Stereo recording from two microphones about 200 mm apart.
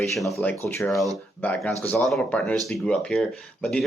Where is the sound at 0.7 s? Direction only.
10° left (ahead or behind).